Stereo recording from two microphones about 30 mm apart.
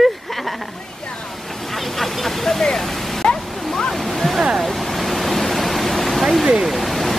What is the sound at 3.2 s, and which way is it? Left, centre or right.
Waterfall, left.